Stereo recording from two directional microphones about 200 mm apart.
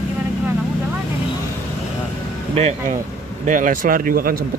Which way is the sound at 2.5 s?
30° right (ahead or behind).